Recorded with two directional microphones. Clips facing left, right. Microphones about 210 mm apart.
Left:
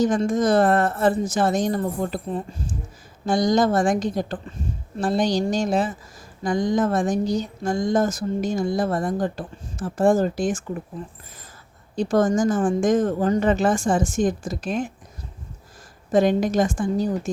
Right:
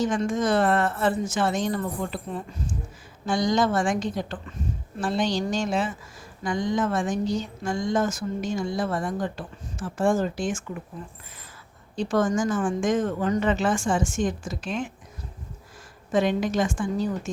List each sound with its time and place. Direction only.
0.0 s speech: 40° left (ahead or behind)
11.9 s speech: 40° left (ahead or behind)
16.1 s speech: 40° left (ahead or behind)